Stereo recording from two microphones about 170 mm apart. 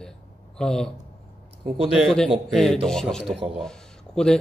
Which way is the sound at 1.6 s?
35° right (ahead or behind).